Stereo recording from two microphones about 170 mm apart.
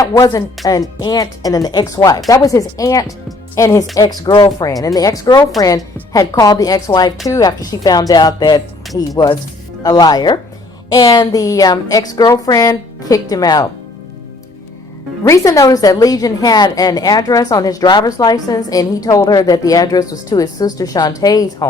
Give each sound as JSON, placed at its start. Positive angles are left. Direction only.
{"t": 0.0, "sound": "a woman's voice", "side_deg": 20}
{"t": 15.2, "sound": "a woman's voice", "side_deg": 20}